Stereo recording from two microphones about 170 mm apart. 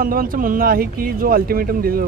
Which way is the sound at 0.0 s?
55° right (ahead or behind).